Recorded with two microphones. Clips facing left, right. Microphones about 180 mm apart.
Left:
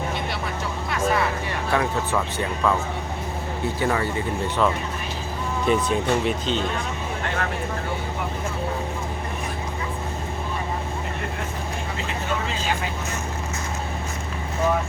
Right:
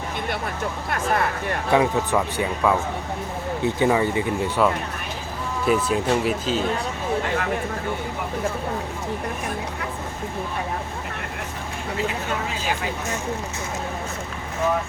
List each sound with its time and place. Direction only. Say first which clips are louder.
0.9 s vehicle: left 1 dB; 50° right (ahead or behind)
1.7 s speech: right 4 dB; 15° right (ahead or behind)
5.6 s speech: right 1 dB; 5° right (ahead or behind)